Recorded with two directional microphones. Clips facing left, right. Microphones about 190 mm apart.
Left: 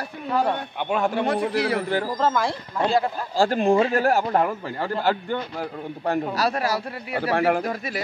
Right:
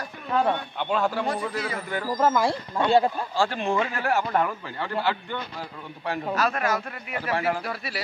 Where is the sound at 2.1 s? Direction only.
10° right (ahead or behind).